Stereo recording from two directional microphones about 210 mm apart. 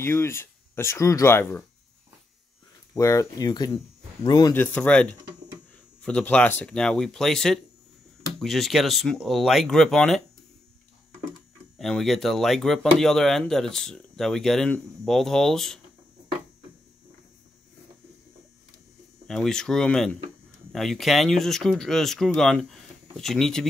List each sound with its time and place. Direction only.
0.0 s speech: 10° left (ahead or behind)
2.9 s speech: 15° left (ahead or behind)
4.6 s speech: 5° left (ahead or behind)
6.0 s speech: 5° left (ahead or behind)
11.8 s speech: centre (ahead or behind)
19.2 s speech: 5° left (ahead or behind)